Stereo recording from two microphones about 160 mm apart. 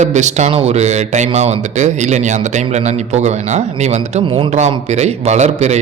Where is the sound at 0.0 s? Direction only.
45° right (ahead or behind).